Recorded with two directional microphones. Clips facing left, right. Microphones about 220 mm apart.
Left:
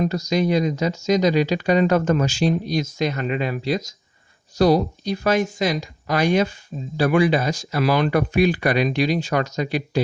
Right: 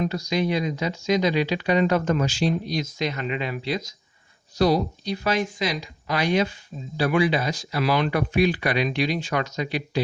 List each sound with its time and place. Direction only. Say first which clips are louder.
0.0 s speech: left 4 dB; 45° left (ahead or behind)